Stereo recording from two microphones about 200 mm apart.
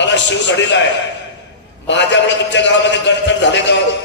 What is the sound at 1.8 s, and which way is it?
Speech, 65° left (ahead or behind).